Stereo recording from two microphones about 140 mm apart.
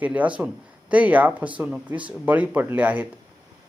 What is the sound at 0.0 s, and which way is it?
Speech, 10° right (ahead or behind).